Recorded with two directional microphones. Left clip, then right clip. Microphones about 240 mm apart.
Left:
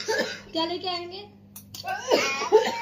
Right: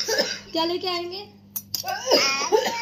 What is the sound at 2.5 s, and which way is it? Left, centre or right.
Music, centre.